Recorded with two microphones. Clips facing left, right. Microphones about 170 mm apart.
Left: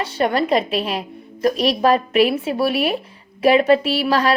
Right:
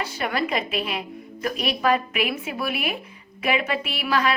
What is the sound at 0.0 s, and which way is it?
A woman's voice, 30° left (ahead or behind).